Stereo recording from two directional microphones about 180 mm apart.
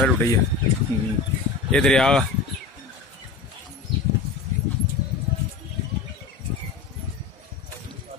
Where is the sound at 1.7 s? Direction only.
5° left (ahead or behind).